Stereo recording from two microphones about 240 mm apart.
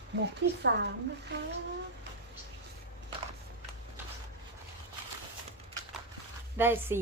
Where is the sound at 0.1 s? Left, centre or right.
Right.